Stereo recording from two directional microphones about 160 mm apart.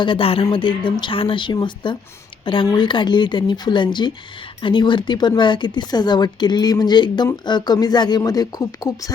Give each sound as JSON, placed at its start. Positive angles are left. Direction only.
{"t": 0.0, "sound": "speech", "side_deg": 35}